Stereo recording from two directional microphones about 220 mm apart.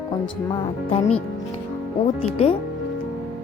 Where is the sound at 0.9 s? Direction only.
25° left (ahead or behind).